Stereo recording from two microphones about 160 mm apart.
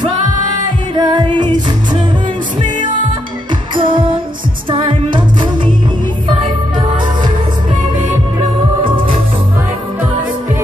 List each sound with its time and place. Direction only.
0.9 s music: 30° right (ahead or behind)
3.7 s music: 30° right (ahead or behind)
8.8 s music: 30° right (ahead or behind)